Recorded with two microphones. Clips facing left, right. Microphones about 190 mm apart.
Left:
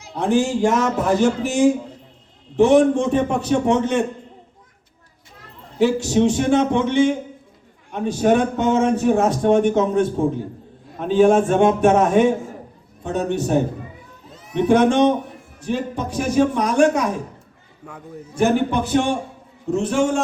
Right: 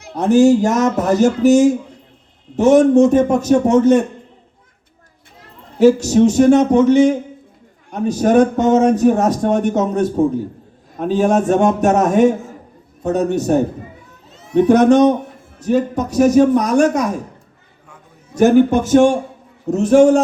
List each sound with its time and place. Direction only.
0.2 s a man's voice: 40° right (ahead or behind)
5.8 s a man's voice: 40° right (ahead or behind)
18.3 s a man's voice: 45° right (ahead or behind)